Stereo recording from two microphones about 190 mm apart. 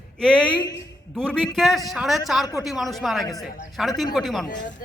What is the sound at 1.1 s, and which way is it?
A man's voice, 5° left (ahead or behind).